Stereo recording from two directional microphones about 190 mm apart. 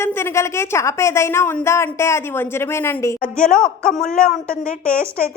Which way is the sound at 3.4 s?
5° left (ahead or behind).